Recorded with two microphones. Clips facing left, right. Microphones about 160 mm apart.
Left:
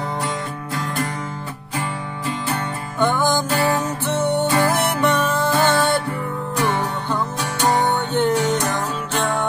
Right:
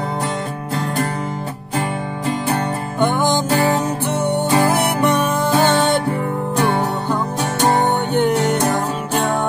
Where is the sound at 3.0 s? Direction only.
20° right (ahead or behind).